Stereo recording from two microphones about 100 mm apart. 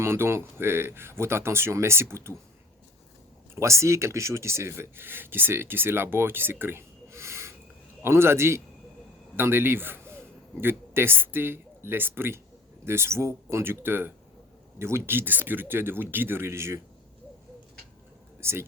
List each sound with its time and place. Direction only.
0.0 s speech: 25° right (ahead or behind)
3.5 s a man's voice: 30° right (ahead or behind)
18.3 s speech: 25° right (ahead or behind)